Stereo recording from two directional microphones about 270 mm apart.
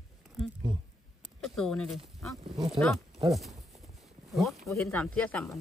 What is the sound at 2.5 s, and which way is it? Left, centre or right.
Speech, centre.